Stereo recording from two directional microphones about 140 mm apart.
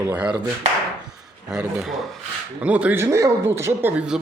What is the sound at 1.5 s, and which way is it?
A man's voice, 5° right (ahead or behind).